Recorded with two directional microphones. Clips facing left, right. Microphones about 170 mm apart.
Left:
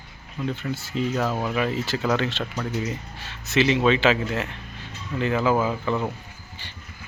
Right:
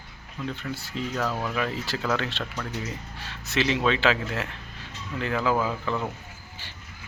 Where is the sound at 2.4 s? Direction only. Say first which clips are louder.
Left 5 dB; 15° left (ahead or behind).